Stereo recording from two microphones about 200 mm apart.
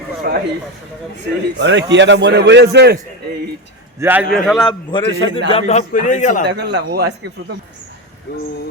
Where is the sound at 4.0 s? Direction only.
10° right (ahead or behind).